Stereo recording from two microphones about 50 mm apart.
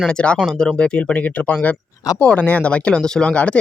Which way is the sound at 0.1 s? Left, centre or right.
Centre.